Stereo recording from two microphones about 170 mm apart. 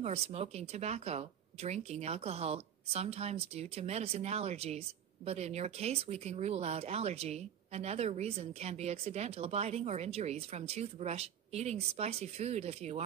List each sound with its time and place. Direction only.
0.0 s speech: 35° right (ahead or behind)